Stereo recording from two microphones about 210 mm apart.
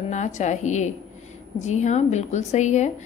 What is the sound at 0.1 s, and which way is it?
A woman's voice, 35° left (ahead or behind).